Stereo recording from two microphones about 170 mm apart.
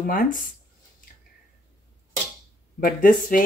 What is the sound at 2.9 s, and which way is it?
Speech, 55° left (ahead or behind).